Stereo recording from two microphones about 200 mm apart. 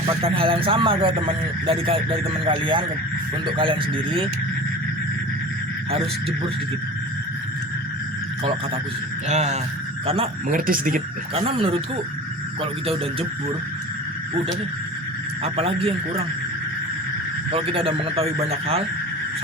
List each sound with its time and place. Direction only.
0.0 s speech: 25° right (ahead or behind)
9.3 s speech: 35° right (ahead or behind)
11.3 s speech: 30° right (ahead or behind)
15.4 s speech: 30° right (ahead or behind)
17.5 s speech: 30° right (ahead or behind)